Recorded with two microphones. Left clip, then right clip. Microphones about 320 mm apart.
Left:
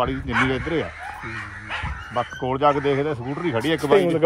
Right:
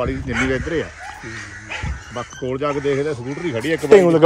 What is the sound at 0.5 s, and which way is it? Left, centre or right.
Speech, centre.